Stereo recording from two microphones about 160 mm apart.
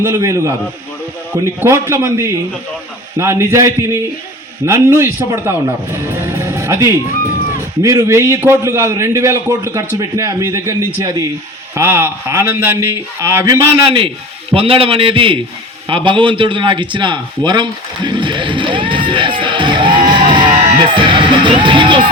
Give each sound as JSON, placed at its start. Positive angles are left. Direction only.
{"t": 0.0, "sound": "a man's voice", "side_deg": -15}
{"t": 14.5, "sound": "a man's voice", "side_deg": -35}
{"t": 20.3, "sound": "music", "side_deg": -30}